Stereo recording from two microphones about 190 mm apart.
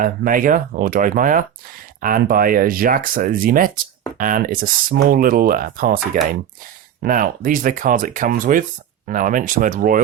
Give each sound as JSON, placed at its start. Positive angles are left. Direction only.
{"t": 0.0, "sound": "speech", "side_deg": -45}
{"t": 7.0, "sound": "speech", "side_deg": -45}